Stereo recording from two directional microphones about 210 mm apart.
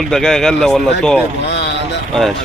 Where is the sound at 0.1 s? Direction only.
Centre (ahead or behind).